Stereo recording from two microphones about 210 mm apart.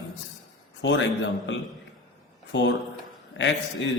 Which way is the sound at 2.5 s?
60° left (ahead or behind).